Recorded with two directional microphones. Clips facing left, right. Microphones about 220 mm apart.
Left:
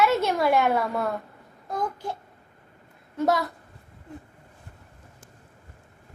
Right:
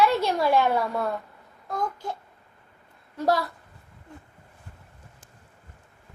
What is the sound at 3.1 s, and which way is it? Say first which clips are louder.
Speech: left 1 dB; 20° left (ahead or behind).